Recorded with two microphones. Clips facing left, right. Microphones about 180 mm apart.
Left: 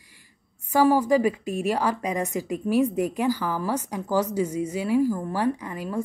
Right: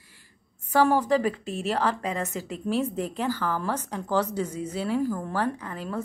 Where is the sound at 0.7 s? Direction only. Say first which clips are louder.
Left 2 dB; 10° left (ahead or behind).